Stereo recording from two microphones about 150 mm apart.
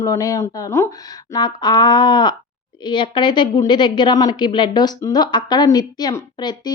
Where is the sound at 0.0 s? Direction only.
20° left (ahead or behind).